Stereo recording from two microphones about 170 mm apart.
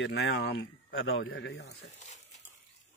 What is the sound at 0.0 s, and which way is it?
Speech, 90° left.